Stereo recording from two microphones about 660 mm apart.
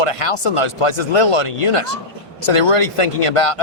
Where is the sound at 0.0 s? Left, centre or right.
Left.